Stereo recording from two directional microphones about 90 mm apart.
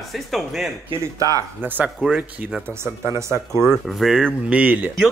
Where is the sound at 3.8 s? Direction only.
Centre (ahead or behind).